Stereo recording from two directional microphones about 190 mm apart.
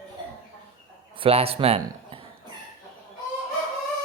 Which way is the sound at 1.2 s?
30° right (ahead or behind).